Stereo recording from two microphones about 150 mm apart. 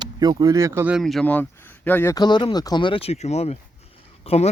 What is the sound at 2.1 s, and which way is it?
Speech, 30° left (ahead or behind).